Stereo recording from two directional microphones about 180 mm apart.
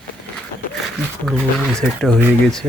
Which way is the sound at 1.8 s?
Centre (ahead or behind).